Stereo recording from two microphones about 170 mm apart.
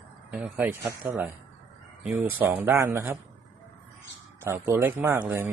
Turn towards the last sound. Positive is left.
turn(degrees=-15)  # may be behind; listen again after turning